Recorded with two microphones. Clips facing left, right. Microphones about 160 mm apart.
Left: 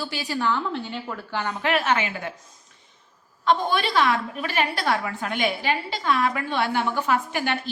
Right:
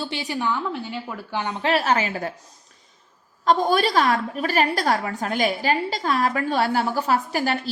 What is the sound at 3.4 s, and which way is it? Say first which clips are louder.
A woman's voice: right 3 dB; 40° right (ahead or behind).